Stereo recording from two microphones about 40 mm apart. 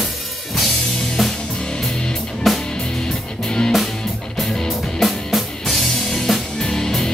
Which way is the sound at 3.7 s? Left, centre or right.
Centre.